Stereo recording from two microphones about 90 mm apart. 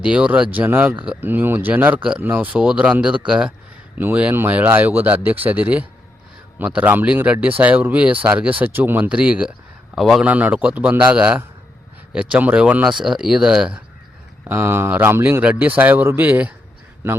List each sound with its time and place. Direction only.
0.0 s speech: 15° right (ahead or behind)
3.9 s speech: 20° right (ahead or behind)
9.9 s a man's voice: centre (ahead or behind)
10.2 s speech: 15° right (ahead or behind)
14.4 s speech: 25° right (ahead or behind)